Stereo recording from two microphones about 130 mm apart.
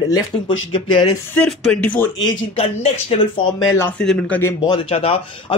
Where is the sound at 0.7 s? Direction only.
40° left (ahead or behind).